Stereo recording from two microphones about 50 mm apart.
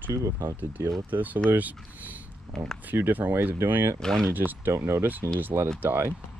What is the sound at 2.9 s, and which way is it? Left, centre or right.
Speech, right.